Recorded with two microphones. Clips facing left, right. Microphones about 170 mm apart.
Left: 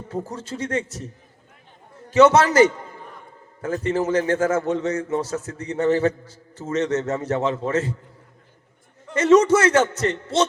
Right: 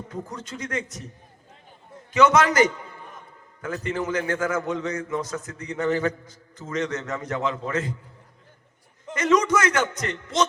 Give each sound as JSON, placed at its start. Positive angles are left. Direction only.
{"t": 0.1, "sound": "a man's voice", "side_deg": 30}
{"t": 9.1, "sound": "a man's voice", "side_deg": 30}